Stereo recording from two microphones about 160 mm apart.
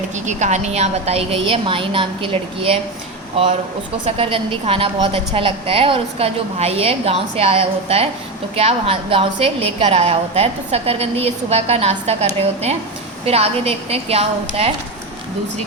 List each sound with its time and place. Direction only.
0.3 s a woman's voice: 45° right (ahead or behind)
4.0 s a woman's voice: 35° right (ahead or behind)